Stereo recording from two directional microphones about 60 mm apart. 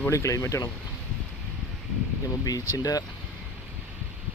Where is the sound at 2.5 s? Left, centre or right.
Left.